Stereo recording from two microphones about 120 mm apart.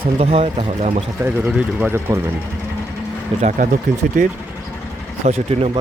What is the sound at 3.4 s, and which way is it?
Speech, 90° right.